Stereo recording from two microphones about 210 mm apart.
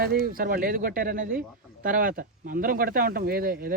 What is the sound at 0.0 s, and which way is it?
Speech, 45° right (ahead or behind).